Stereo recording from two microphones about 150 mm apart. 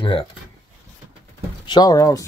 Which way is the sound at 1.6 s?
30° left (ahead or behind).